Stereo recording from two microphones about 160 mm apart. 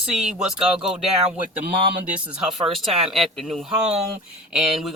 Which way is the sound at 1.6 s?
90° right.